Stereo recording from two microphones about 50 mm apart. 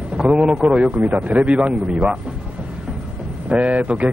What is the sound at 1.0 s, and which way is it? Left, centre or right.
Speech, right.